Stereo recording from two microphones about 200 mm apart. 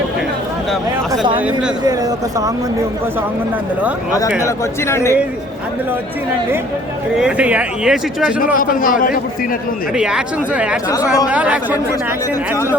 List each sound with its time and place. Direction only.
1.4 s speech: 5° right (ahead or behind)
1.8 s speech: 20° right (ahead or behind)
4.4 s a man's voice: 15° left (ahead or behind)
7.2 s speech: 5° right (ahead or behind)
8.5 s a man's voice: 45° left (ahead or behind)
9.9 s speech: 5° right (ahead or behind)
10.8 s a man's voice: 20° left (ahead or behind)
11.3 s speech: 5° right (ahead or behind)